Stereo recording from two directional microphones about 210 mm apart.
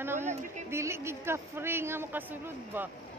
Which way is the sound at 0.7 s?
10° right (ahead or behind).